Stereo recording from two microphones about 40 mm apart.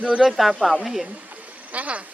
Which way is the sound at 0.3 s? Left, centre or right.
Centre.